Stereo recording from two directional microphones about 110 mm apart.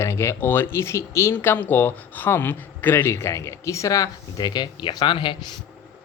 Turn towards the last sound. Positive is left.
turn(degrees=45)  # may be behind; listen again after turning